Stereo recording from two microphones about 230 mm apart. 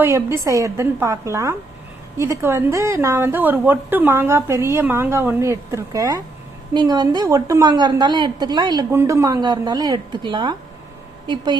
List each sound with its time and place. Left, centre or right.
0.0 s a woman's voice: centre